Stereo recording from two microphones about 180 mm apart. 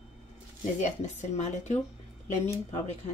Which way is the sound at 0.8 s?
40° left (ahead or behind).